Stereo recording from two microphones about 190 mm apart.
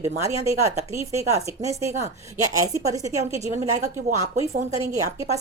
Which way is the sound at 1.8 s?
35° right (ahead or behind).